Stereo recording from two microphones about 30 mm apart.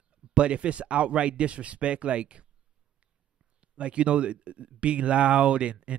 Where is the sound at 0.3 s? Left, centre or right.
Right.